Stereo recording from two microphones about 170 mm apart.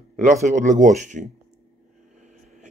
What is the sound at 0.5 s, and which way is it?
Speech, 45° right (ahead or behind).